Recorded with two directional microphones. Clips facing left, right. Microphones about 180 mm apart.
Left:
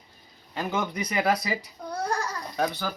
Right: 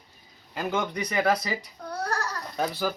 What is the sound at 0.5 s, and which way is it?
Speech, centre (ahead or behind).